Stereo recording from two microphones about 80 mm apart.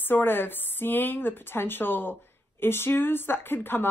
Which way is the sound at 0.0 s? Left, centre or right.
Left.